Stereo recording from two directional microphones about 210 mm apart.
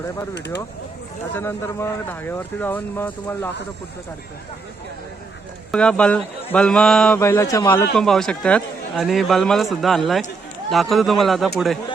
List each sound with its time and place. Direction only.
0.3 s speech: 55° left (ahead or behind)
1.4 s speech: 10° left (ahead or behind)
5.7 s a man's voice: 5° left (ahead or behind)
7.9 s a man's voice: centre (ahead or behind)